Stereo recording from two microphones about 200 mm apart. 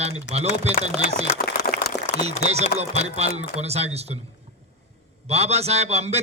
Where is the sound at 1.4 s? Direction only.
45° left (ahead or behind).